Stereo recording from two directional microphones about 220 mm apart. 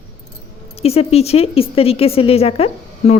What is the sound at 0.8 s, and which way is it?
Speech, 25° left (ahead or behind).